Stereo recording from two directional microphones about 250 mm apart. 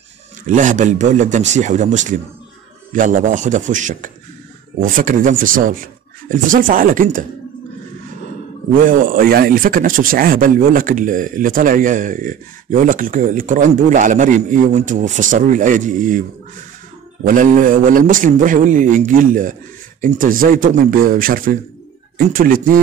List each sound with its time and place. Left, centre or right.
0.5 s a man's voice: right
8.7 s speech: right
17.2 s speech: right